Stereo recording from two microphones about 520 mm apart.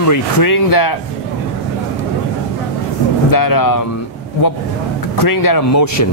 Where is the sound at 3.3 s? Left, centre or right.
Left.